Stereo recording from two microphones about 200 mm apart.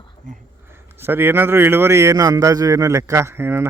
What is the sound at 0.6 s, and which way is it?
A man's voice, 10° right (ahead or behind).